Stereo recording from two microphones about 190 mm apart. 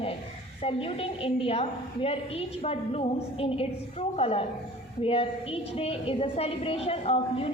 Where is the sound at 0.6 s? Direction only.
30° left (ahead or behind).